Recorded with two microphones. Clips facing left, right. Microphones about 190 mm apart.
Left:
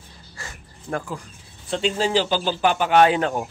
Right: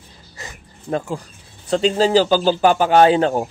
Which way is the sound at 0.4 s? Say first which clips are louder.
Right 3 dB; 20° right (ahead or behind).